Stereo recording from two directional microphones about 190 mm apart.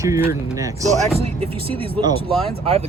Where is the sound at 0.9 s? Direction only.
30° right (ahead or behind).